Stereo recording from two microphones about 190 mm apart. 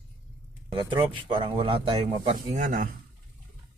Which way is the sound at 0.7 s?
25° right (ahead or behind).